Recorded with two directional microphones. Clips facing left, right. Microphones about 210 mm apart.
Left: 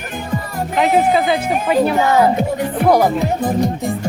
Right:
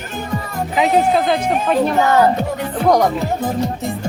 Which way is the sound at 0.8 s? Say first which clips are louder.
Left 1 dB; centre (ahead or behind).